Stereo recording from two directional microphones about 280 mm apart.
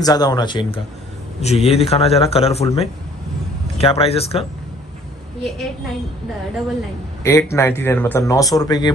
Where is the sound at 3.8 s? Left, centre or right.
Left.